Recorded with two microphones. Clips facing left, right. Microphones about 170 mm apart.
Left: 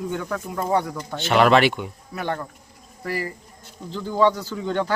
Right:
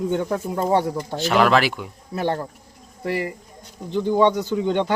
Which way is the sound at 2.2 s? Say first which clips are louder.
Right 4 dB; 30° right (ahead or behind).